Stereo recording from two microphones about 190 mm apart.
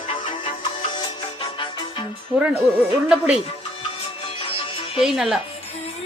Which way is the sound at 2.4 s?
5° right (ahead or behind).